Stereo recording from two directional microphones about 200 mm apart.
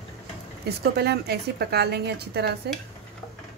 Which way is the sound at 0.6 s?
55° right (ahead or behind).